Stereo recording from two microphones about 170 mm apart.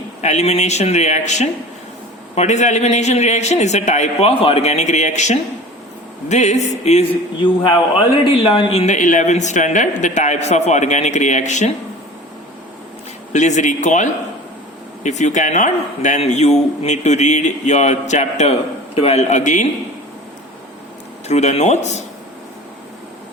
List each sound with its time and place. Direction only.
0.2 s a man's voice: 40° left (ahead or behind)
8.2 s speech: 30° left (ahead or behind)
13.3 s speech: 45° left (ahead or behind)
21.2 s a man's voice: 40° left (ahead or behind)